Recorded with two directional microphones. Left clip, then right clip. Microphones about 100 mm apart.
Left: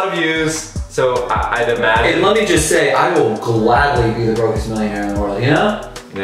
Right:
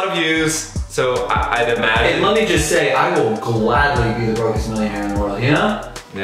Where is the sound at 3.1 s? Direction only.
Centre (ahead or behind).